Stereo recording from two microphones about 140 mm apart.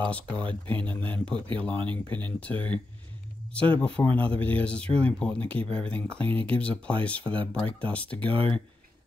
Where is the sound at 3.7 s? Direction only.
10° left (ahead or behind).